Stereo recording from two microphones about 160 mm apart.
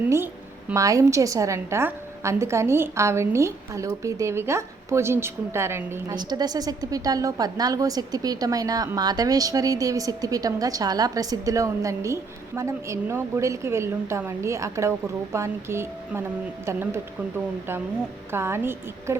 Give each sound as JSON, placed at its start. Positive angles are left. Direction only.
{"t": 0.7, "sound": "a woman's voice", "side_deg": -20}
{"t": 18.3, "sound": "a woman's voice", "side_deg": -15}